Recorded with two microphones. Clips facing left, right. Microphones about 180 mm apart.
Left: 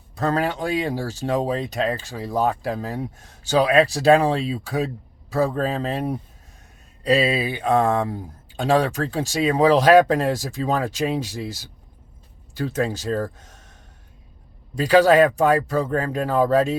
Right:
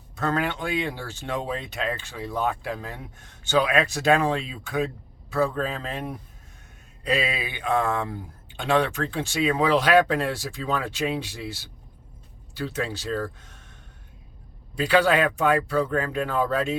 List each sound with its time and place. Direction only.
0.2 s speech: 35° left (ahead or behind)
14.8 s speech: 40° left (ahead or behind)